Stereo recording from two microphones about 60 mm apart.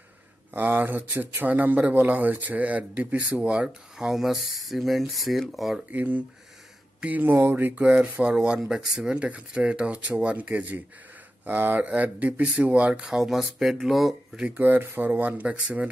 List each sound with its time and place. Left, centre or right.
0.5 s speech: right
3.6 s speech: centre
5.9 s speech: right
7.3 s speech: right
7.7 s speech: right
13.0 s speech: centre
14.6 s speech: right